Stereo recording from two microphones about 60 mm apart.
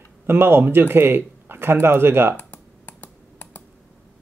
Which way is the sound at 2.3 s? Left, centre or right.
Left.